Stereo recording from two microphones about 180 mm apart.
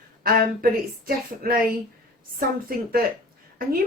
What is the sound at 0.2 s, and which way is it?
Speech, 55° right (ahead or behind).